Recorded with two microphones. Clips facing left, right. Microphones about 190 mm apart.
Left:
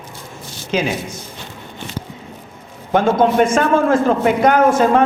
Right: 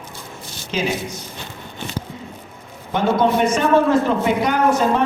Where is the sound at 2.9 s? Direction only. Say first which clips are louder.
Left 3 dB; 50° left (ahead or behind).